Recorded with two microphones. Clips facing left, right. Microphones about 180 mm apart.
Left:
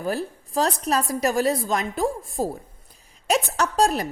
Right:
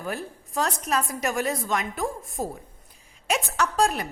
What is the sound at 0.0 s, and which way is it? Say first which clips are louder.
A woman's voice: left 6 dB; 35° left (ahead or behind).